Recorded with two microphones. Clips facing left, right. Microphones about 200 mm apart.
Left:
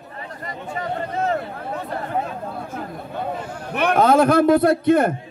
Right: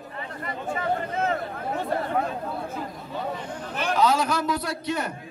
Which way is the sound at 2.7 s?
55° left (ahead or behind).